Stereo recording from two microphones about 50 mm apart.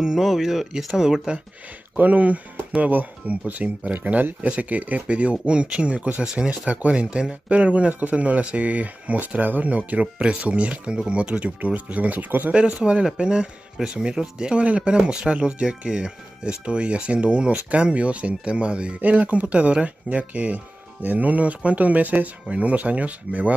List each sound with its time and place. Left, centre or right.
0.0 s speech: centre
2.0 s speech: right
12.5 s speech: centre
18.9 s speech: right